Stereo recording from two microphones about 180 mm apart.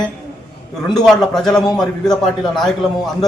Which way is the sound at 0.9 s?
Centre (ahead or behind).